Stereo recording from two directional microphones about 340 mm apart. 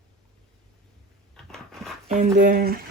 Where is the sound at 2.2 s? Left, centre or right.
Right.